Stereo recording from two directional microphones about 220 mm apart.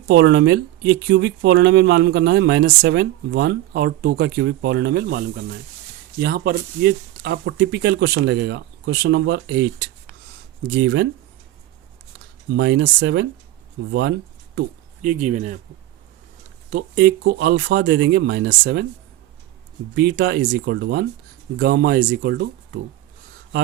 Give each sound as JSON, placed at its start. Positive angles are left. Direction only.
{"t": 0.1, "sound": "speech", "side_deg": -55}
{"t": 12.5, "sound": "speech", "side_deg": -50}
{"t": 13.9, "sound": "a sound", "side_deg": -50}
{"t": 15.0, "sound": "speech", "side_deg": -35}
{"t": 16.6, "sound": "speech", "side_deg": -45}
{"t": 20.0, "sound": "speech", "side_deg": -45}